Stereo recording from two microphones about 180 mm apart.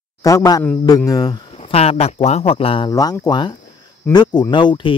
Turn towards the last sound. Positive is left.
turn(degrees=25)  # may be behind; listen again after turning